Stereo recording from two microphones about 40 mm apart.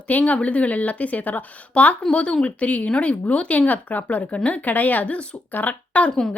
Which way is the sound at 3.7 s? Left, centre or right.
Left.